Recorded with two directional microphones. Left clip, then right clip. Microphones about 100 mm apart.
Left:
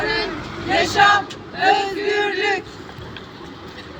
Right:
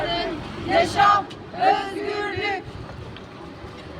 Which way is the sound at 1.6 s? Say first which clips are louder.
Left 3 dB; 20° right (ahead or behind).